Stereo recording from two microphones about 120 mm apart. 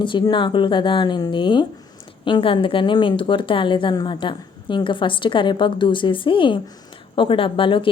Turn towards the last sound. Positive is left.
turn(degrees=45)  # may be behind; listen again after turning